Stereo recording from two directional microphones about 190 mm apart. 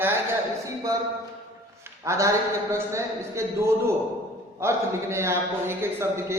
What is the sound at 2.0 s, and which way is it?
A man's voice, 15° right (ahead or behind).